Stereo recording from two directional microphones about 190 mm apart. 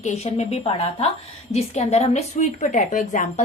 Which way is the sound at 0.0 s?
35° left (ahead or behind).